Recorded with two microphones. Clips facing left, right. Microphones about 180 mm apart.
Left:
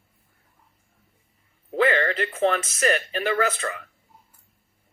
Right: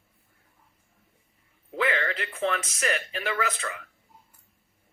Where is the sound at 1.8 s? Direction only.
50° left (ahead or behind).